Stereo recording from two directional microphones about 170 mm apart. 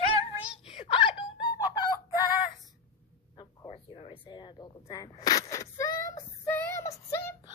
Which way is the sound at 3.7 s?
35° left (ahead or behind).